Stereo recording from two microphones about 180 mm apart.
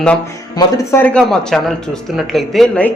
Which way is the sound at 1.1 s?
5° left (ahead or behind).